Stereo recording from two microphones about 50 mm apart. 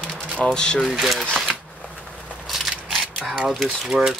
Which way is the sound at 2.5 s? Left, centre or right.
Centre.